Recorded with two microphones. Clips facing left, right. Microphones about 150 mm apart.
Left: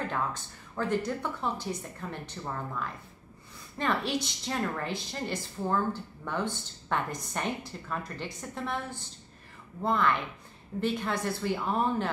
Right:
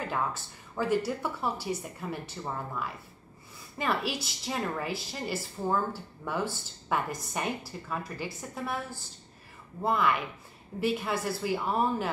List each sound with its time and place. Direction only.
0.1 s a woman's voice: 5° right (ahead or behind)